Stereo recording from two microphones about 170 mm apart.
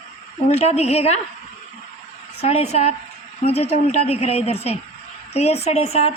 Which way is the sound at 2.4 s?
40° left (ahead or behind).